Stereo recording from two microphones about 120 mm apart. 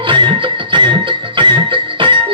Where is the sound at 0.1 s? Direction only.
40° right (ahead or behind).